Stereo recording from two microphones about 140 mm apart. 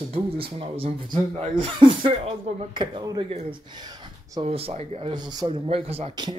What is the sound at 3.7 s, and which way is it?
Speech, 30° right (ahead or behind).